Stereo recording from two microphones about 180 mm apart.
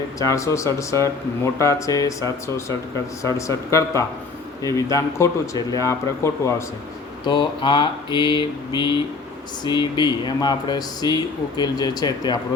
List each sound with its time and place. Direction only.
0.2 s speech: 15° left (ahead or behind)